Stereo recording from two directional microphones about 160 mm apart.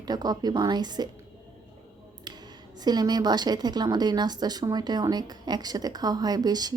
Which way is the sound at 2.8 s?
25° right (ahead or behind).